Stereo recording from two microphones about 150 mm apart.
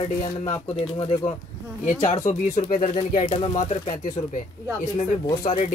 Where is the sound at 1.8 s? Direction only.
50° left (ahead or behind).